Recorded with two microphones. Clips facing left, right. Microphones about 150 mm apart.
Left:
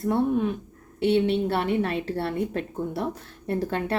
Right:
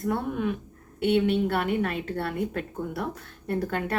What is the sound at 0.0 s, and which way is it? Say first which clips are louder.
Speech: left 4 dB; 30° left (ahead or behind).